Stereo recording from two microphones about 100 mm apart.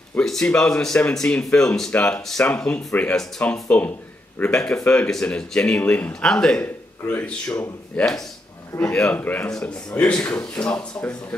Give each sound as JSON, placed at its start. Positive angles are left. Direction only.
{"t": 0.2, "sound": "speech", "side_deg": 5}
{"t": 8.7, "sound": "speech", "side_deg": 15}